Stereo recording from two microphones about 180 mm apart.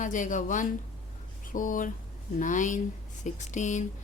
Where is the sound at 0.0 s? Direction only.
45° left (ahead or behind).